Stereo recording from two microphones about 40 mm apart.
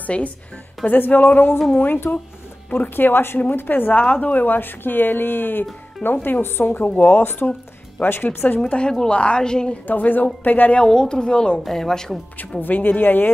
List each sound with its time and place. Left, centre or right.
0.0 s speech: left
0.8 s speech: left
3.3 s speech: left
8.6 s a woman's voice: left
9.8 s speech: left
10.8 s a woman's voice: centre
12.4 s speech: left